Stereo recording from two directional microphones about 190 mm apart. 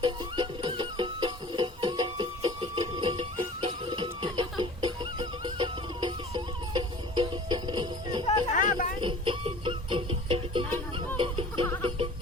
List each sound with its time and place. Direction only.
0.0 s music: 25° right (ahead or behind)
8.3 s a sound: 45° left (ahead or behind)
9.0 s music: 25° right (ahead or behind)